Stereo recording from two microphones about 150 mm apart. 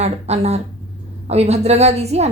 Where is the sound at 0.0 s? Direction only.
45° right (ahead or behind).